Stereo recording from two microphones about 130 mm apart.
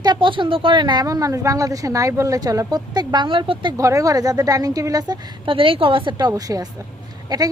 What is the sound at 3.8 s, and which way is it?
A woman's voice, 25° right (ahead or behind).